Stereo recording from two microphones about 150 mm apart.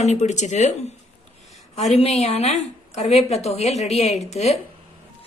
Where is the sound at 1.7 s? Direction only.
50° left (ahead or behind).